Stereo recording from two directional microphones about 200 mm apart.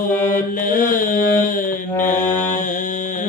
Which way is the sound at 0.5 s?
45° left (ahead or behind).